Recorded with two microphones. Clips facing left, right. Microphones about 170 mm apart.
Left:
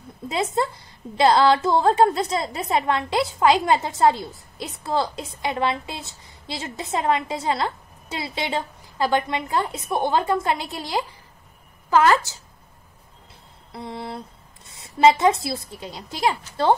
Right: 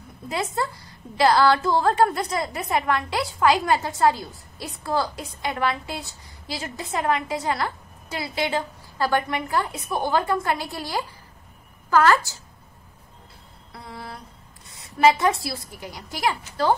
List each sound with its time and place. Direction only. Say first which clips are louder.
0.3 s a woman's voice: left 3 dB; 20° left (ahead or behind)
13.7 s a woman's voice: left 6 dB; 20° left (ahead or behind)